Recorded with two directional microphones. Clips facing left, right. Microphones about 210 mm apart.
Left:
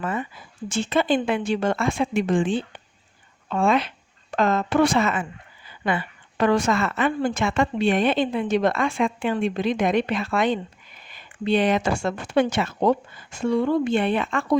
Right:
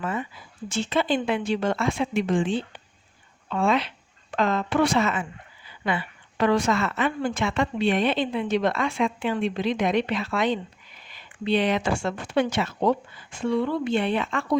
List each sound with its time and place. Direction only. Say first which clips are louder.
0.0 s a woman's voice: left 2 dB; 50° left (ahead or behind)